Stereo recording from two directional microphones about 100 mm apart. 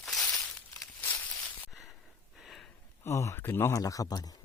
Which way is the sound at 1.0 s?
15° left (ahead or behind).